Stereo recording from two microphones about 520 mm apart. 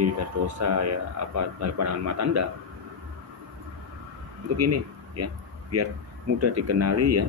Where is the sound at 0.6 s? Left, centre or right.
Right.